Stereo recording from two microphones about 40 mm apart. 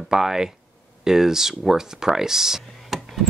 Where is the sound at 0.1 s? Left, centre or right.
Centre.